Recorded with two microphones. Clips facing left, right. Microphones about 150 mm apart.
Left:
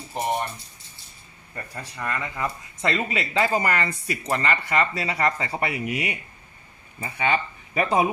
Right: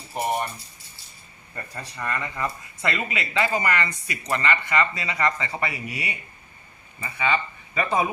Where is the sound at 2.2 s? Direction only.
15° left (ahead or behind).